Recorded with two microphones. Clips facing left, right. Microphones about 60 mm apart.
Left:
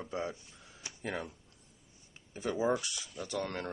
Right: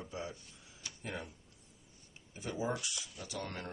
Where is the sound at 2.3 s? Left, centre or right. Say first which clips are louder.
Left 6 dB; left.